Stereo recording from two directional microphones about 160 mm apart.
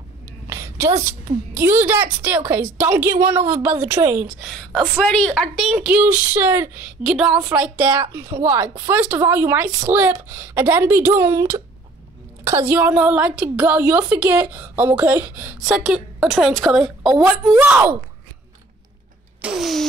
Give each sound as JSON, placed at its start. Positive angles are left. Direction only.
{"t": 0.5, "sound": "a woman's voice", "side_deg": -20}
{"t": 4.4, "sound": "a woman's voice", "side_deg": 0}
{"t": 7.0, "sound": "a woman's voice", "side_deg": 0}
{"t": 19.4, "sound": "a woman's voice", "side_deg": -5}